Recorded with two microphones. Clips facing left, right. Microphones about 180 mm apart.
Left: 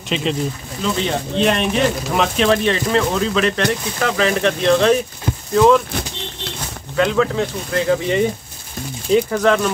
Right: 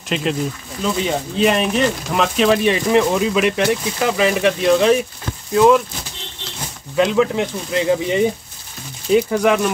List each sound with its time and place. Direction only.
0.1 s speech: 5° right (ahead or behind)
7.0 s speech: 15° right (ahead or behind)
9.4 s speech: 10° right (ahead or behind)